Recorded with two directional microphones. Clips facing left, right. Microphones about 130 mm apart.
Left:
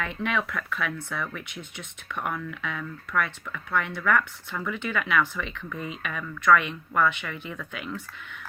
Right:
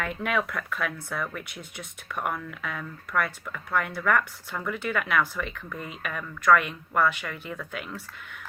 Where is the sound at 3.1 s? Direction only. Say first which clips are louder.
Even; 40° right (ahead or behind).